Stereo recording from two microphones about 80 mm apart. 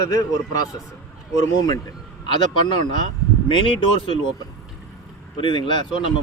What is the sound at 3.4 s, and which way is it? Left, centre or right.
Speech, left.